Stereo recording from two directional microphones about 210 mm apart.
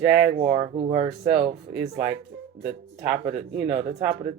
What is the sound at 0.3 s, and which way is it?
Speech, 30° right (ahead or behind).